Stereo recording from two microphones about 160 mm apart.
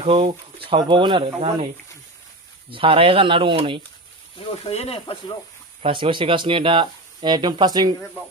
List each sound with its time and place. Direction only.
0.0 s speech: 35° right (ahead or behind)
2.7 s speech: 35° right (ahead or behind)
4.4 s speech: 40° left (ahead or behind)
5.8 s speech: 30° right (ahead or behind)